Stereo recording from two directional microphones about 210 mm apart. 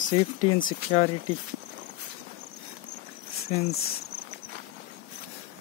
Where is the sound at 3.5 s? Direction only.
30° left (ahead or behind).